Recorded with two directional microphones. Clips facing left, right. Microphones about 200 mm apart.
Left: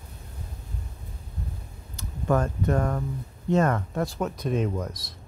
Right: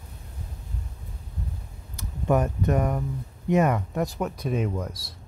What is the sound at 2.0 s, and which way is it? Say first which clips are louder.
Speech: right 1 dB; 20° right (ahead or behind).